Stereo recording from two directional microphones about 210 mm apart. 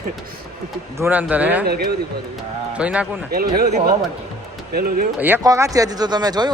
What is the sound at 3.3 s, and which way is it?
A man's voice, 45° right (ahead or behind).